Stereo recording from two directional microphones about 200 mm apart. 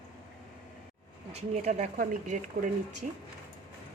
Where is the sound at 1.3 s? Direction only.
35° right (ahead or behind).